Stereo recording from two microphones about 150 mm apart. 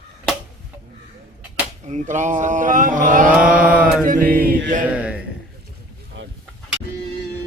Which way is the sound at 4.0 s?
70° right (ahead or behind).